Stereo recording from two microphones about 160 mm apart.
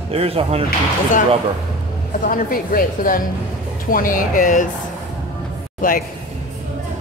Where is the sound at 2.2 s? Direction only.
60° left (ahead or behind).